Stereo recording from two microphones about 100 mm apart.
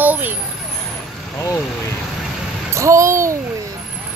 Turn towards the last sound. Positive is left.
turn(degrees=-30)  # may be behind; listen again after turning